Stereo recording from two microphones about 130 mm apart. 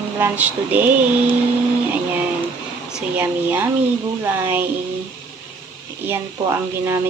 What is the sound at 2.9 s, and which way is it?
Speech, 15° right (ahead or behind).